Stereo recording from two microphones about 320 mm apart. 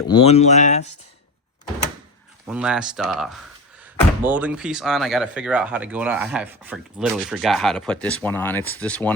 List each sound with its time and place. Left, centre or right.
0.1 s speech: centre
2.5 s speech: centre